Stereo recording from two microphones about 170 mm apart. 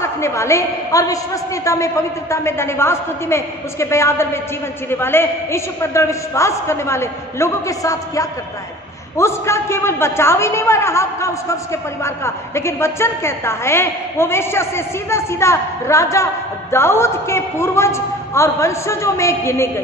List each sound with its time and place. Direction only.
0.0 s a man's voice: 15° left (ahead or behind)